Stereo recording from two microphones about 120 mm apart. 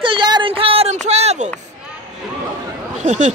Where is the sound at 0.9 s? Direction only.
65° right (ahead or behind).